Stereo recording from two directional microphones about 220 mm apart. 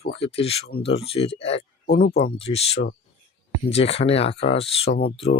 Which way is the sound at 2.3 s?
25° left (ahead or behind).